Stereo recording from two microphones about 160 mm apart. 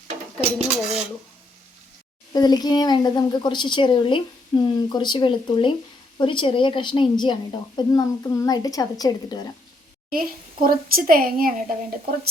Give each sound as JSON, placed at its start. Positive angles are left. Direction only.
{"t": 0.8, "sound": "dishes", "side_deg": -5}
{"t": 2.3, "sound": "a woman's voice", "side_deg": 25}
{"t": 10.1, "sound": "a woman's voice", "side_deg": -65}